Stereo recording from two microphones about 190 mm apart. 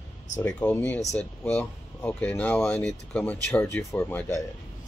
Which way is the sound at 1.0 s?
35° left (ahead or behind).